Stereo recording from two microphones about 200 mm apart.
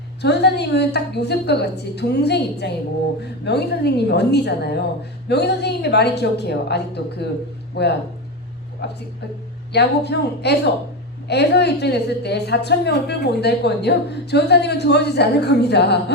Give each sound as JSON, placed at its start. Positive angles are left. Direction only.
{"t": 0.2, "sound": "a woman's voice", "side_deg": 55}